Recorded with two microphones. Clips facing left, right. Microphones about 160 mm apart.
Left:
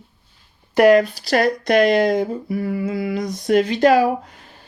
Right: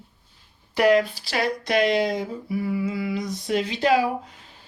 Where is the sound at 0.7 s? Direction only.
50° left (ahead or behind).